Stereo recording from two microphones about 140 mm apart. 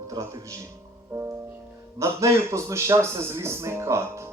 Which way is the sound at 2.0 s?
20° right (ahead or behind).